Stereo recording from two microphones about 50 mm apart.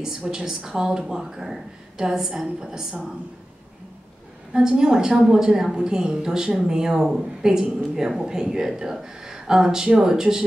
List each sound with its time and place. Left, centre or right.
0.0 s a woman's voice: centre
4.6 s a woman's voice: centre